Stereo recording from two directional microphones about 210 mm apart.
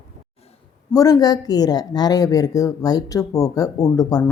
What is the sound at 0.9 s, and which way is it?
A woman's voice, 15° left (ahead or behind).